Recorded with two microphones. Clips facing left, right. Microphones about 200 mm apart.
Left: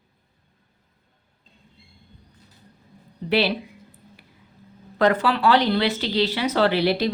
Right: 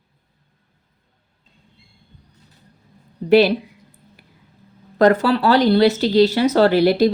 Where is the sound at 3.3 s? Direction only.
45° right (ahead or behind).